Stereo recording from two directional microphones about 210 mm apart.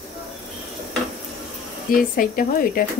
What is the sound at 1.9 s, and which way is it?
Speech, 40° left (ahead or behind).